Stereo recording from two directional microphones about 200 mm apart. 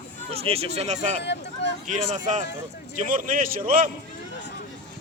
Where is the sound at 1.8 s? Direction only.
40° right (ahead or behind).